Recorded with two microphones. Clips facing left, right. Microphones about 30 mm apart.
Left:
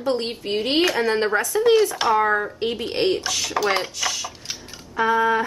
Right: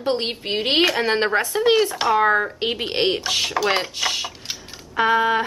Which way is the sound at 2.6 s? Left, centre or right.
Right.